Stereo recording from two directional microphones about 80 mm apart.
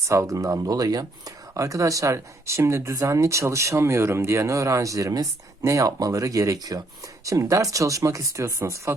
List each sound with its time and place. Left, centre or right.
0.1 s speech: right
1.5 s speech: right